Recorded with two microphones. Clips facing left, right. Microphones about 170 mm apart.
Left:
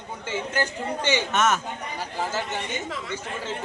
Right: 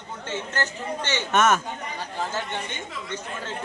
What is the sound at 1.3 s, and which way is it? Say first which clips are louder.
Speech: right 5 dB; 55° right (ahead or behind).